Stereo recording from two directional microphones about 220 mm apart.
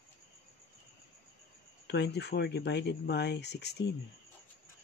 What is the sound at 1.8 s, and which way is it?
Speech, 50° left (ahead or behind).